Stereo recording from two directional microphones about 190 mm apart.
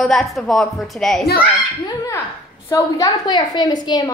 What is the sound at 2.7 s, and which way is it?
A woman's voice, 15° left (ahead or behind).